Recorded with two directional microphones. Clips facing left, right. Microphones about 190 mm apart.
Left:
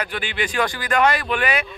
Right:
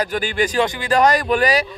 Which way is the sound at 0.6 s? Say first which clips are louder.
Right 2 dB; 25° right (ahead or behind).